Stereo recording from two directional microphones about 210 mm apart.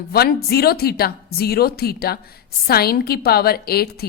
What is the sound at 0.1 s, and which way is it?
A woman's voice, 45° left (ahead or behind).